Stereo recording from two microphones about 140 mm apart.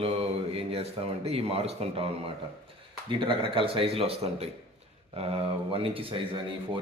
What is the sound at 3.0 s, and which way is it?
Speech, 35° right (ahead or behind).